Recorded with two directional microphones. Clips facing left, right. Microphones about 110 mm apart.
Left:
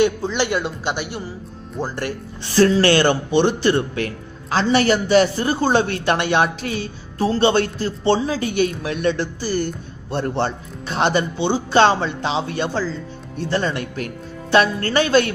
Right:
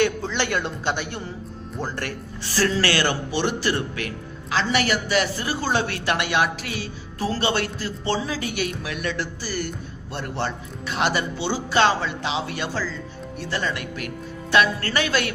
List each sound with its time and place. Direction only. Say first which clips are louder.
0.0 s speech: left 4 dB; 15° left (ahead or behind)
2.6 s a woman's voice: left 7 dB; 25° left (ahead or behind)